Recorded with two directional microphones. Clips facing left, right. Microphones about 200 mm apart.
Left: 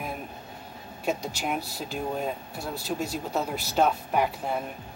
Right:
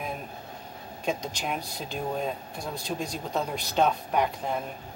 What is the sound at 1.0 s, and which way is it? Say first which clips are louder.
Speech: left 1 dB; 5° left (ahead or behind).